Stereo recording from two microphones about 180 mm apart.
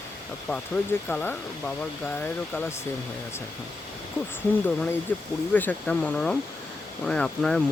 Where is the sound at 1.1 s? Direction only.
10° left (ahead or behind).